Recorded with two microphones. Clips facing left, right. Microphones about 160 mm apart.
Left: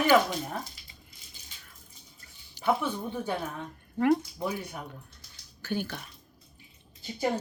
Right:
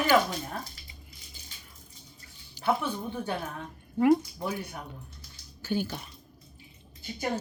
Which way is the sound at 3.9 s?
10° right (ahead or behind).